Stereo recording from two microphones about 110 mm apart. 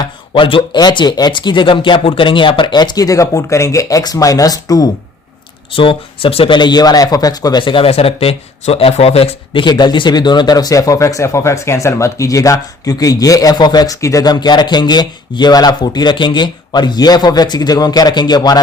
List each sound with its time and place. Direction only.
0.0 s speech: 50° left (ahead or behind)
0.8 s speech: 40° left (ahead or behind)
5.7 s speech: 55° left (ahead or behind); by 7.6 s 35° left (ahead or behind)
7.6 s speech: 50° left (ahead or behind)